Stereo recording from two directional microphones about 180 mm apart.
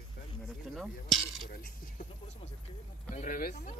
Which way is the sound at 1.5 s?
55° left (ahead or behind).